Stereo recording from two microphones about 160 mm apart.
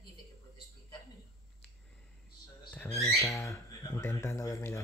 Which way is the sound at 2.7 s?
15° left (ahead or behind).